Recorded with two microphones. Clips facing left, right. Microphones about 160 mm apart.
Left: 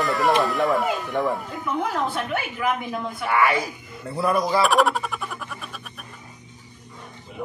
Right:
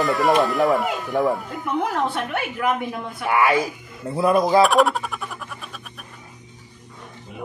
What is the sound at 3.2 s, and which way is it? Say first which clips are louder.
A man's voice: right 3 dB; 15° right (ahead or behind).